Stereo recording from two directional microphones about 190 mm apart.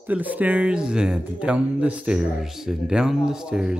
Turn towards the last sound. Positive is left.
turn(degrees=-5)  # may be behind; listen again after turning